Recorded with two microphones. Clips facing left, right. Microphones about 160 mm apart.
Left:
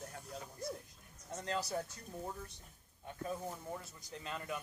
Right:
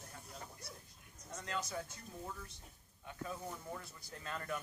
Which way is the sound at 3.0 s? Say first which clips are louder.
Left 3 dB; 35° left (ahead or behind).